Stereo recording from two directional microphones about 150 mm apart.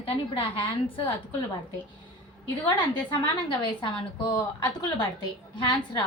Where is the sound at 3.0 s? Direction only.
30° left (ahead or behind).